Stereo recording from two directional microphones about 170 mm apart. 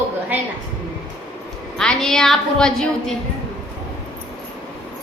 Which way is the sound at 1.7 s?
5° left (ahead or behind).